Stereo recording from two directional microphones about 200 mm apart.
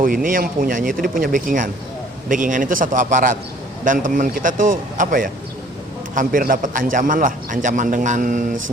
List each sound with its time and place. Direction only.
0.0 s a man's voice: 45° right (ahead or behind)